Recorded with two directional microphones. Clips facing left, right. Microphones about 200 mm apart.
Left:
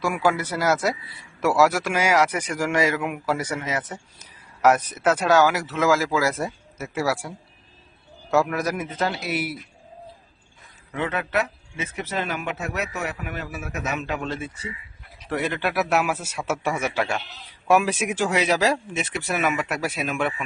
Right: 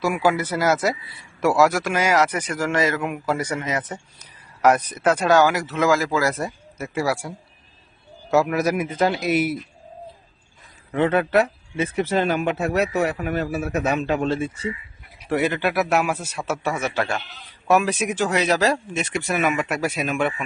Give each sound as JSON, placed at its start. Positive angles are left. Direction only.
{"t": 0.0, "sound": "speech", "side_deg": 0}
{"t": 10.9, "sound": "speech", "side_deg": -35}
{"t": 15.2, "sound": "a man's voice", "side_deg": -10}